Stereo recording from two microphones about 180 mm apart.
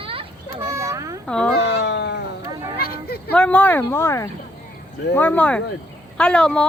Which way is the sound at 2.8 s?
60° left (ahead or behind).